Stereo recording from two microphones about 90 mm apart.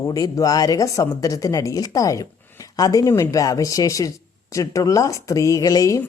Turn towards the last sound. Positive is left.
turn(degrees=40)  # may be behind; listen again after turning